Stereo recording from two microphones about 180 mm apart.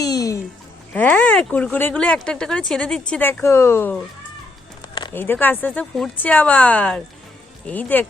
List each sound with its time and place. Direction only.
0.0 s music: 20° left (ahead or behind)
0.9 s speech: 10° left (ahead or behind)
4.8 s a sound: 25° left (ahead or behind)
5.1 s speech: 10° left (ahead or behind)